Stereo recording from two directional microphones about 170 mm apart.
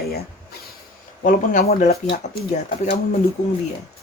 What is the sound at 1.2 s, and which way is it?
Speech, 50° left (ahead or behind).